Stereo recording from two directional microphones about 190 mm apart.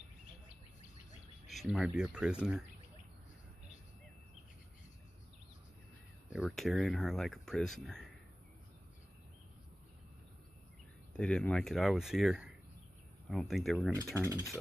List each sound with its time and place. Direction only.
1.5 s speech: centre (ahead or behind)
6.3 s speech: centre (ahead or behind)
11.1 s speech: 5° left (ahead or behind)
14.1 s speech: 15° right (ahead or behind)